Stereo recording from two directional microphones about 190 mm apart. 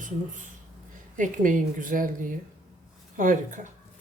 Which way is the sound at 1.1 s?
45° right (ahead or behind).